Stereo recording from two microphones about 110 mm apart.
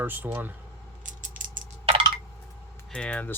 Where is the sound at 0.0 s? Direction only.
15° right (ahead or behind).